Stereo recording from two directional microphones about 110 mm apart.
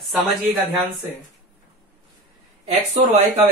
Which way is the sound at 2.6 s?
60° right (ahead or behind).